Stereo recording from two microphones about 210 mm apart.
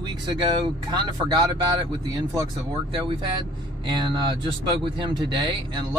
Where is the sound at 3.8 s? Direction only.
20° right (ahead or behind).